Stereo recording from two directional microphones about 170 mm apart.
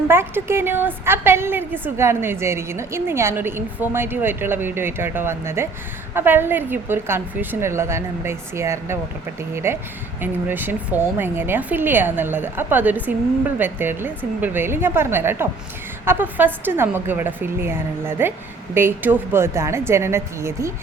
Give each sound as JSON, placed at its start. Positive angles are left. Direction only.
{"t": 0.1, "sound": "a woman's voice", "side_deg": -15}